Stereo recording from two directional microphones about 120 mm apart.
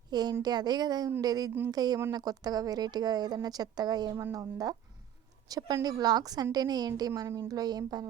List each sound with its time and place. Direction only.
0.1 s a woman's voice: 35° right (ahead or behind)